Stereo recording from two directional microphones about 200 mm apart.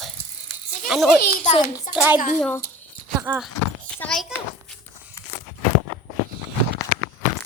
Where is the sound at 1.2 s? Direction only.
40° left (ahead or behind).